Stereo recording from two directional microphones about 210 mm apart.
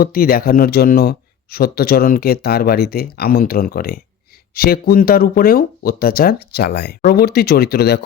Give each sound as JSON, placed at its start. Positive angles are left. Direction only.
{"t": 0.0, "sound": "speech", "side_deg": 45}